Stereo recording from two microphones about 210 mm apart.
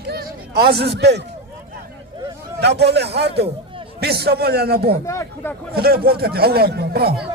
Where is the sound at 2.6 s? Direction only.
55° right (ahead or behind).